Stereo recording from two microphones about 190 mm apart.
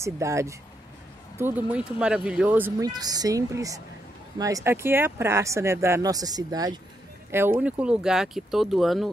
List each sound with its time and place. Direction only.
0.0 s speech: 15° right (ahead or behind)